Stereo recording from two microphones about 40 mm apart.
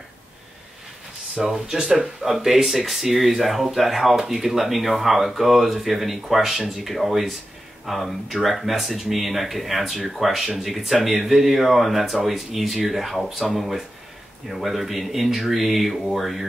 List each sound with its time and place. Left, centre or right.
1.3 s speech: centre